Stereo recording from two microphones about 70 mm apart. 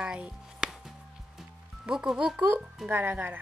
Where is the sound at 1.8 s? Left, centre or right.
Centre.